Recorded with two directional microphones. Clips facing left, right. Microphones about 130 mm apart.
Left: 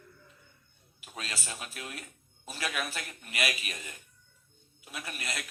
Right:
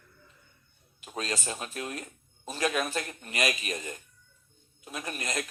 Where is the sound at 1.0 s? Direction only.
40° right (ahead or behind).